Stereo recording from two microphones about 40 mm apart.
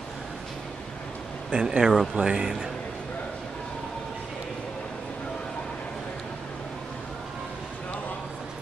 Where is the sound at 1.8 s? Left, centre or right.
Centre.